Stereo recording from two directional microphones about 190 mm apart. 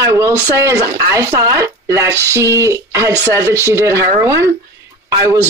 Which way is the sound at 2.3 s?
15° right (ahead or behind).